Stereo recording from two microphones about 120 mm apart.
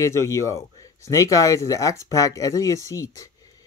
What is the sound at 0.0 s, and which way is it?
Speech, 25° left (ahead or behind).